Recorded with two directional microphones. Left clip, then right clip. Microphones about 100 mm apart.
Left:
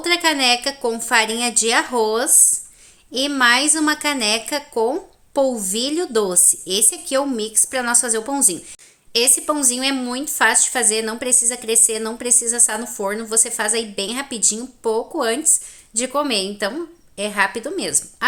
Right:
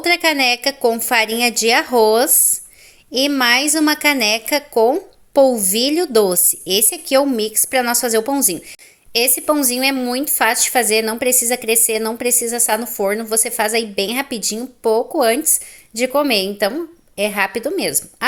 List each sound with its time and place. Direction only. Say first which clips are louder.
0.0 s speech: right 2 dB; 45° right (ahead or behind)
3.1 s a woman's voice: right 1 dB; 35° right (ahead or behind)
9.1 s speech: right 2 dB; 50° right (ahead or behind)